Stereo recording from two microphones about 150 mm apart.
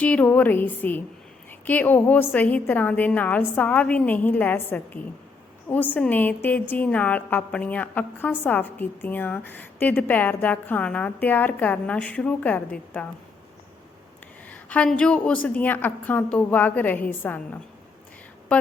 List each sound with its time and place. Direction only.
0.0 s a woman's voice: 10° left (ahead or behind)
14.5 s a woman's voice: 10° left (ahead or behind)